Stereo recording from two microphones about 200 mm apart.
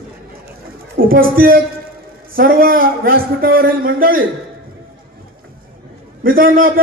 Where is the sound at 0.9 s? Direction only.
45° right (ahead or behind).